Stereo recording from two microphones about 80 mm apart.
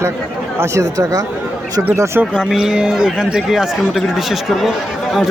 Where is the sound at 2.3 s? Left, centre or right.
Centre.